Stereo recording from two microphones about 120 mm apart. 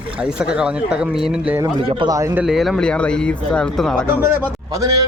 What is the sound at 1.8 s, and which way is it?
Speech, 50° right (ahead or behind).